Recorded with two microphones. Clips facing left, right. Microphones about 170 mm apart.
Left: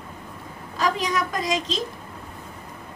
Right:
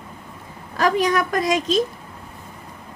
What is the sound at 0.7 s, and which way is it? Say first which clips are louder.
Speech: right 5 dB; 65° right (ahead or behind).